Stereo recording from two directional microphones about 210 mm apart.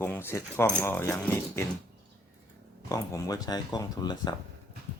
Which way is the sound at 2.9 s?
15° left (ahead or behind).